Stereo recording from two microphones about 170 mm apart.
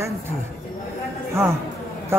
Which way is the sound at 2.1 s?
15° right (ahead or behind).